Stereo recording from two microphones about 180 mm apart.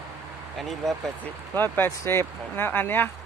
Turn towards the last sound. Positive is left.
turn(degrees=10)  # may be behind; listen again after turning